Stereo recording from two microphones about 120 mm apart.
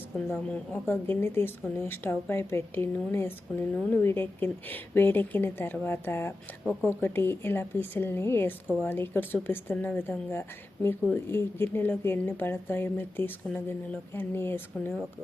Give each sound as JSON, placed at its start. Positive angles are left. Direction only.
{"t": 0.9, "sound": "a woman's voice", "side_deg": 20}